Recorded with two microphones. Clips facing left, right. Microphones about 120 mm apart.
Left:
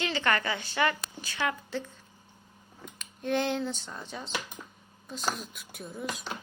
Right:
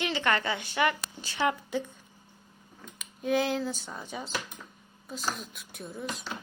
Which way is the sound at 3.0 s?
5° right (ahead or behind).